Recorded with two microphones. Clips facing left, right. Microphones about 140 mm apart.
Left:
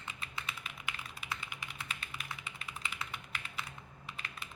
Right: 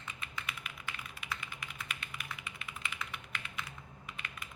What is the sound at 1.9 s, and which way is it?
Computer keyboard, 30° left (ahead or behind).